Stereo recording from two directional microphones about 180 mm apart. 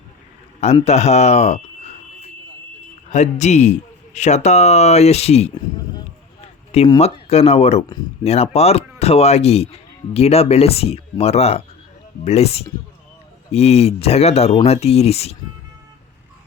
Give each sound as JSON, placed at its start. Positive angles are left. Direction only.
{"t": 0.6, "sound": "speech", "side_deg": 35}
{"t": 3.1, "sound": "speech", "side_deg": 40}
{"t": 6.4, "sound": "a sound", "side_deg": 35}
{"t": 7.0, "sound": "speech", "side_deg": 35}